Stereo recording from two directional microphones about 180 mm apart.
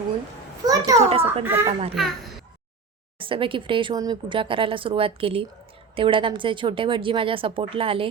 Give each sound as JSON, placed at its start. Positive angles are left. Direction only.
{"t": 0.6, "sound": "a sound", "side_deg": -20}
{"t": 1.2, "sound": "a child's voice", "side_deg": -15}
{"t": 2.0, "sound": "speech", "side_deg": 0}
{"t": 3.2, "sound": "speech", "side_deg": -30}